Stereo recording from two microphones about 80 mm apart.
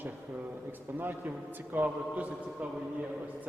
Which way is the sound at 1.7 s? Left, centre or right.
Centre.